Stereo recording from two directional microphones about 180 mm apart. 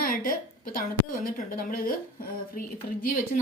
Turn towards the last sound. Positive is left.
turn(degrees=50)  # may be behind; listen again after turning